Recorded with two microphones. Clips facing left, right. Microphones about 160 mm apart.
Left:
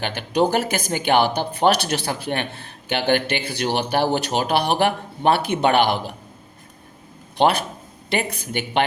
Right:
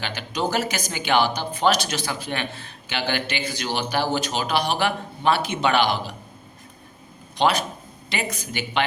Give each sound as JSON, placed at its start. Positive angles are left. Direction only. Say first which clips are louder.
{"t": 0.0, "sound": "speech", "louder": "left 7 dB", "side_deg": 55}
{"t": 7.3, "sound": "speech", "louder": "left 3 dB", "side_deg": 55}